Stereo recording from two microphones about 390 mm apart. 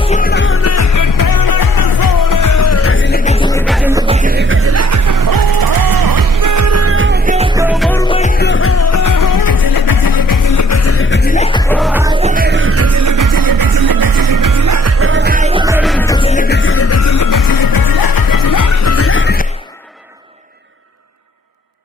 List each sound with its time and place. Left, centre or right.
0.0 s music: centre
3.3 s music: centre
3.6 s music: centre; by 7.2 s right
7.2 s music: centre
7.9 s music: centre
11.7 s music: centre; by 19.4 s left